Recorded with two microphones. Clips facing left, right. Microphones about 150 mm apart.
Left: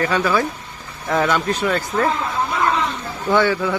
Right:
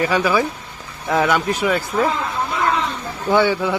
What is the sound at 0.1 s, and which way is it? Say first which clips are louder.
A man's voice: right 1 dB; 10° right (ahead or behind).